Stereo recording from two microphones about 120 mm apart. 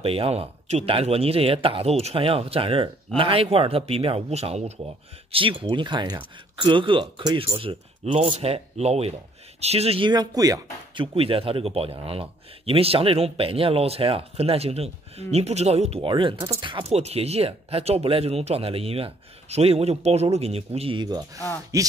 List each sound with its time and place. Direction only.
0.0 s speech: 55° right (ahead or behind)
5.3 s speech: 45° right (ahead or behind)
10.0 s speech: 35° right (ahead or behind)
11.0 s speech: 50° right (ahead or behind)
16.3 s speech: 25° right (ahead or behind)
16.9 s speech: 60° right (ahead or behind)
21.7 s speech: 30° right (ahead or behind)